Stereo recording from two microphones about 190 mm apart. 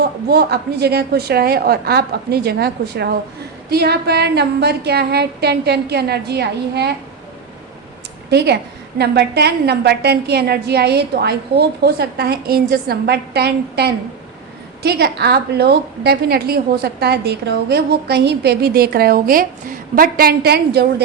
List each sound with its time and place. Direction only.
0.0 s a woman's voice: 55° right (ahead or behind)
8.3 s a woman's voice: 60° right (ahead or behind)